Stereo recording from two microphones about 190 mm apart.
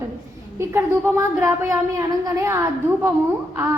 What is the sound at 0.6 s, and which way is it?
A woman's voice, 15° right (ahead or behind).